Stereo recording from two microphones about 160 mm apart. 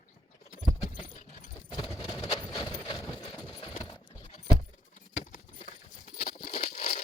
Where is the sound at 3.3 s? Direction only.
30° left (ahead or behind).